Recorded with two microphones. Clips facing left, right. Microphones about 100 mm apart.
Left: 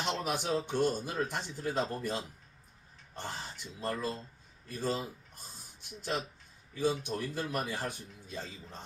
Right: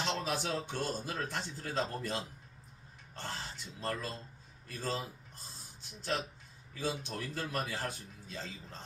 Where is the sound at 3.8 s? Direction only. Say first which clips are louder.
Left 3 dB; 15° left (ahead or behind).